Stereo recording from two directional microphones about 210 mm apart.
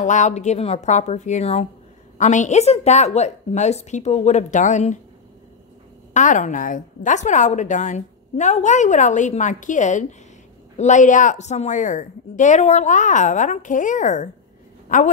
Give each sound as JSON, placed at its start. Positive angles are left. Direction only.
{"t": 0.0, "sound": "a woman's voice", "side_deg": 35}
{"t": 6.1, "sound": "a woman's voice", "side_deg": 35}